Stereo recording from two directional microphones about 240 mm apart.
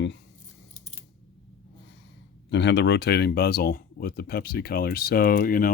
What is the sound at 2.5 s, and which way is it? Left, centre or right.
Speech, left.